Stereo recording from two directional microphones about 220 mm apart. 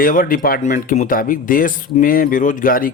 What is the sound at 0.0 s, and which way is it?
Speech, 40° left (ahead or behind).